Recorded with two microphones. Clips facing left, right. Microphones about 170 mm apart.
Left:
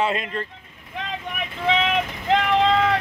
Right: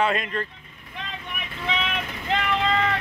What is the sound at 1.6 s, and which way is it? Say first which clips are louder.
Vehicle: left 7 dB; 90° left.